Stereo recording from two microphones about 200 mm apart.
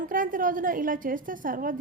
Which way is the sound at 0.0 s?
45° right (ahead or behind).